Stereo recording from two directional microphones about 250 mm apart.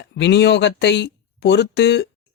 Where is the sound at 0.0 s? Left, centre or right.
Left.